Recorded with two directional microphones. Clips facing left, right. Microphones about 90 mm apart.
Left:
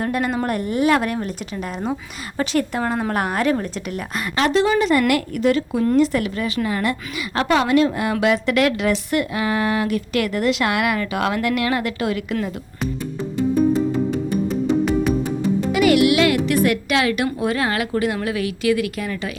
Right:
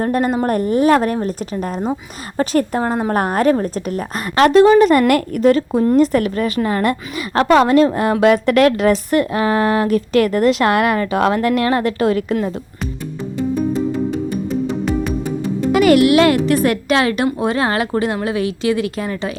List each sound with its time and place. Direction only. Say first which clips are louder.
0.0 s a woman's voice: right 5 dB; 40° right (ahead or behind)
4.4 s a woman's voice: right 8 dB; 55° right (ahead or behind); by 12.4 s 40° right (ahead or behind)
15.7 s a woman's voice: right 5 dB; 45° right (ahead or behind)